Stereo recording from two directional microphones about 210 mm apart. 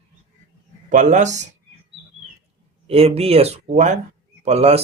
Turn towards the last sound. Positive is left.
turn(degrees=-30)  # may be behind; listen again after turning